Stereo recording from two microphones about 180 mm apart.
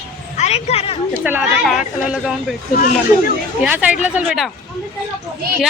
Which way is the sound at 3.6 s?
10° right (ahead or behind).